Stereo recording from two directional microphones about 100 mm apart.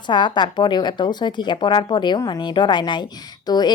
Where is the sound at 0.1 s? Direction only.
50° left (ahead or behind).